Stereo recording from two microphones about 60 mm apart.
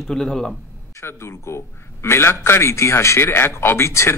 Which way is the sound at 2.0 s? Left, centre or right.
Left.